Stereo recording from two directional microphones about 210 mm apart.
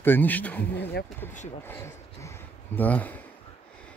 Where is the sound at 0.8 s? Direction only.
55° left (ahead or behind).